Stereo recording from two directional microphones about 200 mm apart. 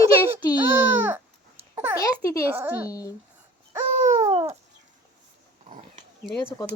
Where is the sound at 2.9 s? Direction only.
15° left (ahead or behind).